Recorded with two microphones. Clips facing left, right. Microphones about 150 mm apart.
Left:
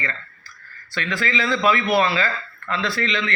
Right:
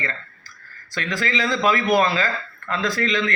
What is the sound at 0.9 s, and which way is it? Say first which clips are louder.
A man's voice: even; 40° right (ahead or behind).